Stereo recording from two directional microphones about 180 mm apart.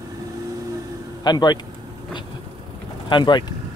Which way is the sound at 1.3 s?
25° left (ahead or behind).